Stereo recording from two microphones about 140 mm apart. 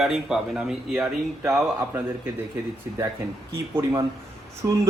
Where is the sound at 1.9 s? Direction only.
15° right (ahead or behind).